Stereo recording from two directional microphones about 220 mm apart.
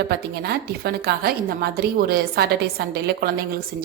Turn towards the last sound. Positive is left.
turn(degrees=-45)  # may be behind; listen again after turning